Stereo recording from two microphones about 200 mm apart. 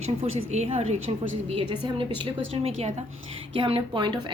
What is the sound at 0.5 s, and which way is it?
Speech, 35° right (ahead or behind).